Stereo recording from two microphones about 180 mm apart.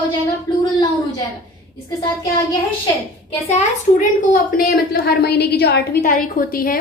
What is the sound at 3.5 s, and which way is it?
A child's voice, 45° left (ahead or behind).